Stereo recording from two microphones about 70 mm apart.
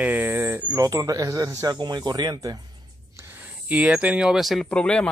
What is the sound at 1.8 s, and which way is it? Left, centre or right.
Speech, right.